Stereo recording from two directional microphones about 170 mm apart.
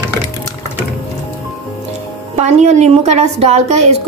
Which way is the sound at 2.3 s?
40° right (ahead or behind).